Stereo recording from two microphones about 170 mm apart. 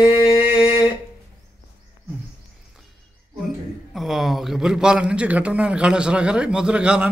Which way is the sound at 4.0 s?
Centre (ahead or behind).